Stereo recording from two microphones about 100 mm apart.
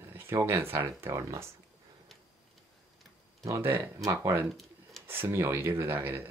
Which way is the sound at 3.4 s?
25° right (ahead or behind).